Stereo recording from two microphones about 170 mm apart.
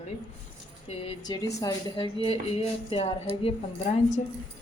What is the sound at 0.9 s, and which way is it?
Speech, 40° left (ahead or behind).